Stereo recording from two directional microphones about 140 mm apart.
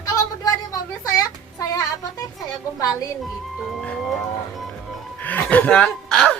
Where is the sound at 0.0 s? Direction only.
25° left (ahead or behind).